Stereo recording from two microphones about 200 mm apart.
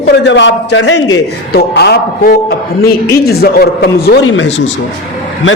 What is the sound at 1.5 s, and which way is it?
A man's voice, 55° left (ahead or behind).